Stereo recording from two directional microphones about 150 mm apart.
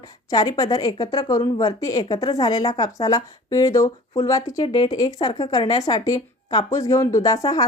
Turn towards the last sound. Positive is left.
turn(degrees=25)  # may be behind; listen again after turning